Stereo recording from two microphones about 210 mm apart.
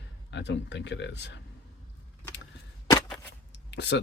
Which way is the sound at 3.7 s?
55° left (ahead or behind).